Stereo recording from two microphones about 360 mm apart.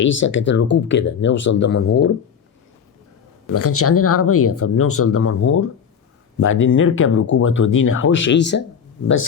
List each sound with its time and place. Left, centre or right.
0.0 s speech: left
3.5 s speech: left